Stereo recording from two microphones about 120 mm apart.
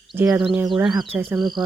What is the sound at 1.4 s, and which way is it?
Speech, 40° right (ahead or behind).